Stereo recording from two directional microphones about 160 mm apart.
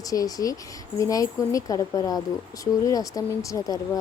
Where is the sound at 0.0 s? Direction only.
20° left (ahead or behind).